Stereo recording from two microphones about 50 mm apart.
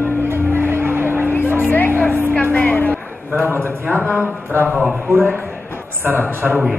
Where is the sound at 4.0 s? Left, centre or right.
Left.